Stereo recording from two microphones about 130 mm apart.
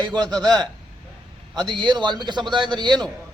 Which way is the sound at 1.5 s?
35° right (ahead or behind).